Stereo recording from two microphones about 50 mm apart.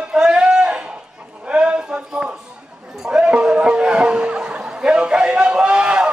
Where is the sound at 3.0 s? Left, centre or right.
Centre.